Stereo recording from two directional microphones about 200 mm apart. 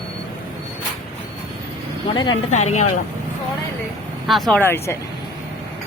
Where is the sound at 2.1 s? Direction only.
25° left (ahead or behind).